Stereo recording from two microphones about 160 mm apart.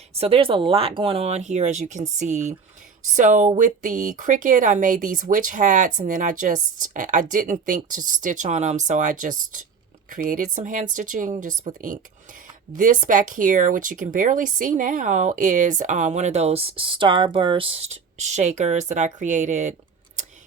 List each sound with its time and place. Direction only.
0.1 s speech: 40° right (ahead or behind); by 11.5 s 55° right (ahead or behind)
12.7 s speech: 55° right (ahead or behind)